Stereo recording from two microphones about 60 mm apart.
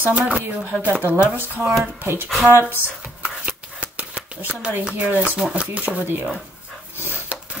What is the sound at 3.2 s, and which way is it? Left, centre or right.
Shuffling cards, right.